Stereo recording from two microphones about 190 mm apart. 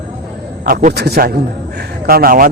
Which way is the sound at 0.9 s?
55° right (ahead or behind).